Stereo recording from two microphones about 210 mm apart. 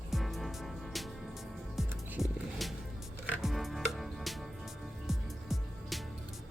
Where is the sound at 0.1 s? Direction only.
Centre (ahead or behind).